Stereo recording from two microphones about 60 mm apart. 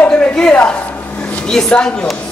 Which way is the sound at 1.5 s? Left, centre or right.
Centre.